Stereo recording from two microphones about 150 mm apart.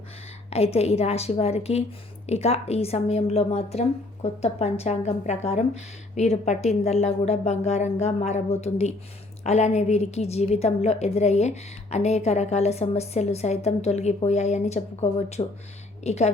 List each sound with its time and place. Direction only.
0.5 s a woman's voice: 45° left (ahead or behind)